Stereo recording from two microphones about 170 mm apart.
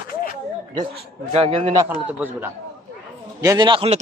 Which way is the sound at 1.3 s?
35° right (ahead or behind).